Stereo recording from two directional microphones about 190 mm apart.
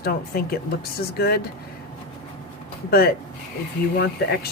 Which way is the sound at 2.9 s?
55° left (ahead or behind).